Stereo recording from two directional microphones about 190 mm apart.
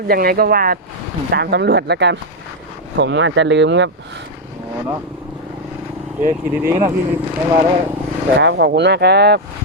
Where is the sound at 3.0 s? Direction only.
75° right (ahead or behind).